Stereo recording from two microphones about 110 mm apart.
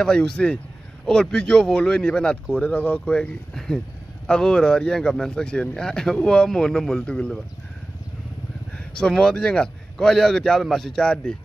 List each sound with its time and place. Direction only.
0.0 s speech: 10° left (ahead or behind)
8.7 s a man's voice: 10° left (ahead or behind)